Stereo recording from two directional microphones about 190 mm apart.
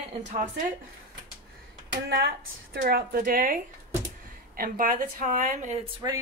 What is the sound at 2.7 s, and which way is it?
A woman's voice, 55° right (ahead or behind).